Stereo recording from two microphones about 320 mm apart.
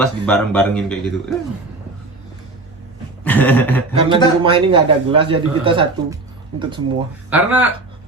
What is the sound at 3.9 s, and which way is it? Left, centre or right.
A man's voice, centre.